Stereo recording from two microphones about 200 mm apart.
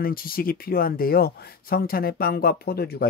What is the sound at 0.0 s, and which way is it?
Speech, 45° left (ahead or behind).